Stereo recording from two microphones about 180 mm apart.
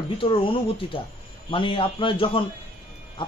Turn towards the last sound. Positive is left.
turn(degrees=25)  # may be behind; listen again after turning